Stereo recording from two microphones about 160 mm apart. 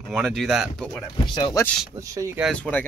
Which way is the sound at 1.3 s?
25° left (ahead or behind).